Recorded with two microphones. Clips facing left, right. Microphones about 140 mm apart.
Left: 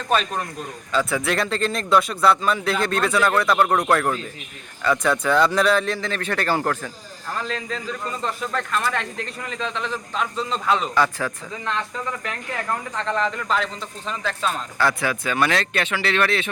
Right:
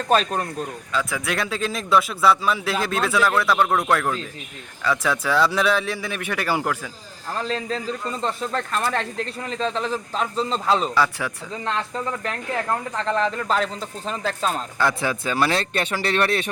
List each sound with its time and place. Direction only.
0.1 s speech: 35° right (ahead or behind)
0.9 s a man's voice: centre (ahead or behind)
7.3 s speech: 35° right (ahead or behind)
10.9 s a man's voice: 10° right (ahead or behind)
13.1 s speech: 35° right (ahead or behind)
14.8 s speech: 25° right (ahead or behind)